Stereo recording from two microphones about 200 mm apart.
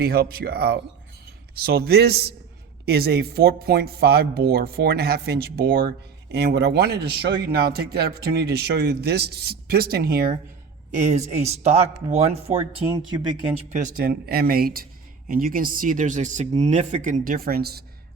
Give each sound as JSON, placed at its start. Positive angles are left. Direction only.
{"t": 0.0, "sound": "speech", "side_deg": -50}
{"t": 10.9, "sound": "speech", "side_deg": -35}
{"t": 13.1, "sound": "speech", "side_deg": -20}
{"t": 13.7, "sound": "speech", "side_deg": -45}